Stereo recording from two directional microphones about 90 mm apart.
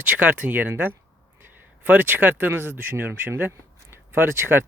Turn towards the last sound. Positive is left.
turn(degrees=-25)  # may be behind; listen again after turning